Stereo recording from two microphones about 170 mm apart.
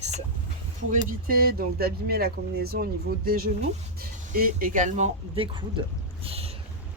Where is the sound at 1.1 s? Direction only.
60° right (ahead or behind).